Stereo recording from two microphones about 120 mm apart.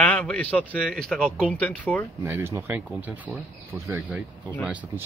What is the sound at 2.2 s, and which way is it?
Speech, 20° right (ahead or behind).